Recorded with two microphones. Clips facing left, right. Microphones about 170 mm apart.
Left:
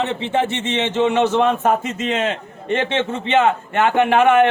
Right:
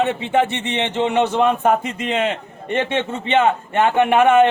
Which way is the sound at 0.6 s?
15° right (ahead or behind).